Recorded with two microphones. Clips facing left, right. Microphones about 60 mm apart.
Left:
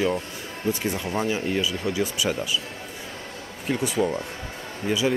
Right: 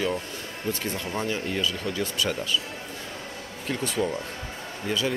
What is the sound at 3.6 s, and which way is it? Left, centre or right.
Speech, centre.